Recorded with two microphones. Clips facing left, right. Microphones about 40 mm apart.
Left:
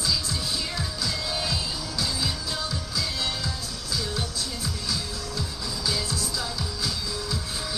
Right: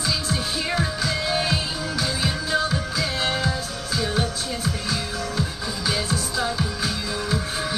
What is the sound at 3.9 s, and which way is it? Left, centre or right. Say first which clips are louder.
Music: right 6 dB; right.